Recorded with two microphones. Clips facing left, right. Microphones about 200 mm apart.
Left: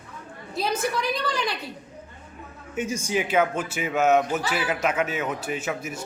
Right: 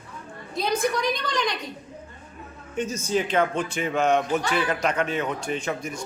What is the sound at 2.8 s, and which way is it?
Speech, 10° left (ahead or behind).